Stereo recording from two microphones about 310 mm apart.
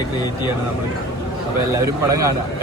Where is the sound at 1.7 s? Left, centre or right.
Centre.